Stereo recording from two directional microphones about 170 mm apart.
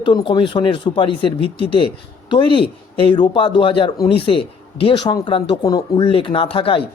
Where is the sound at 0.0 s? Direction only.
25° left (ahead or behind).